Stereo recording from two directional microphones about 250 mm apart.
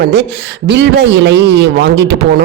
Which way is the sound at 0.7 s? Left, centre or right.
Right.